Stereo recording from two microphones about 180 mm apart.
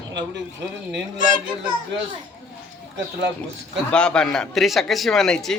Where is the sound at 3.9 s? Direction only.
5° left (ahead or behind).